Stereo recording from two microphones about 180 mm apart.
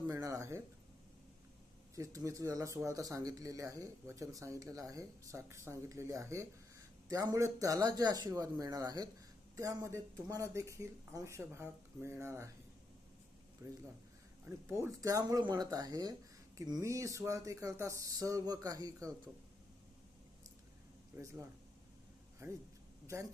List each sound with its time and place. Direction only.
0.1 s a sound: 15° right (ahead or behind)
2.0 s speech: 20° right (ahead or behind)
13.6 s speech: 15° right (ahead or behind)
21.1 s speech: 15° right (ahead or behind)
22.4 s speech: 15° right (ahead or behind)